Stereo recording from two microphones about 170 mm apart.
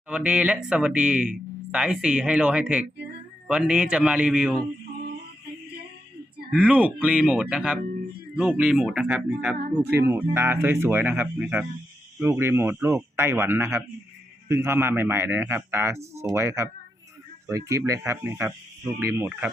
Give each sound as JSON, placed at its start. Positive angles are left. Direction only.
{"t": 0.1, "sound": "speech", "side_deg": -5}
{"t": 6.5, "sound": "speech", "side_deg": -10}
{"t": 9.6, "sound": "speech", "side_deg": -65}
{"t": 10.1, "sound": "speech", "side_deg": -15}
{"t": 17.7, "sound": "speech", "side_deg": -20}